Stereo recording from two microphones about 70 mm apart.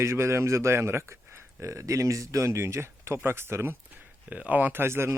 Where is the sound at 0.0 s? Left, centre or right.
Right.